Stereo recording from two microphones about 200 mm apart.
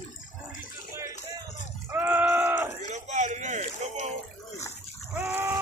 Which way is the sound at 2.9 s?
35° right (ahead or behind).